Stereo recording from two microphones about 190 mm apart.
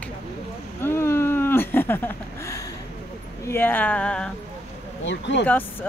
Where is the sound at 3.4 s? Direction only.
10° left (ahead or behind).